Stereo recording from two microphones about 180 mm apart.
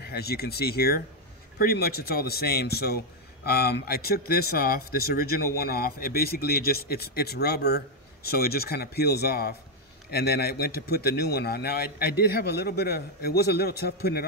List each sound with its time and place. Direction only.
0.0 s speech: 60° left (ahead or behind)